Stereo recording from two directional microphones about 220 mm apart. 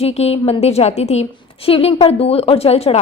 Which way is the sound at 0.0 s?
30° left (ahead or behind).